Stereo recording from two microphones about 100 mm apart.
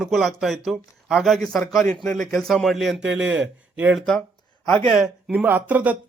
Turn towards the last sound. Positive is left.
turn(degrees=-15)  # may be behind; listen again after turning